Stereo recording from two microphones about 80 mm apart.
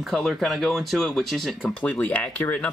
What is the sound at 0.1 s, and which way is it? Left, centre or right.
Speech, centre.